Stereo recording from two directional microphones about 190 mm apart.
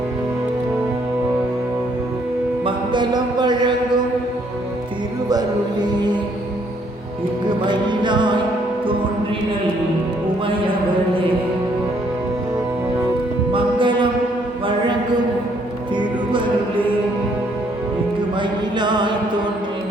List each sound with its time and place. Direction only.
2.6 s music: 25° right (ahead or behind)
5.3 s music: 20° right (ahead or behind)
7.7 s music: 25° right (ahead or behind)
13.5 s music: 25° right (ahead or behind)
18.3 s music: 25° right (ahead or behind)